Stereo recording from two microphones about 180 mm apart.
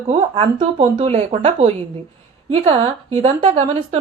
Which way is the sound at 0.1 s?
30° right (ahead or behind).